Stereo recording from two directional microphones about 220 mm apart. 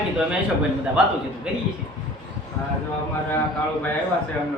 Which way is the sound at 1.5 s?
5° right (ahead or behind).